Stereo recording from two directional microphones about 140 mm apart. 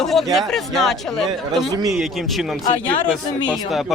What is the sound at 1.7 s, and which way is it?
Speech, 25° right (ahead or behind).